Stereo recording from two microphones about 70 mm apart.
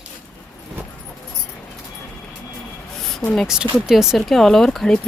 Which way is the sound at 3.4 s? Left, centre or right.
Centre.